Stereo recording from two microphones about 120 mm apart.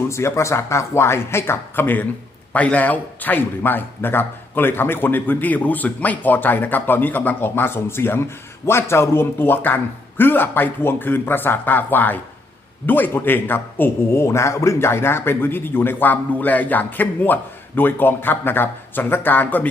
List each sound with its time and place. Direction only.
0.1 s a man's voice: 25° left (ahead or behind)